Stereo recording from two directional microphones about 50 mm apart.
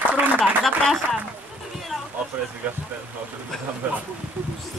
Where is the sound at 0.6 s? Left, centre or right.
Centre.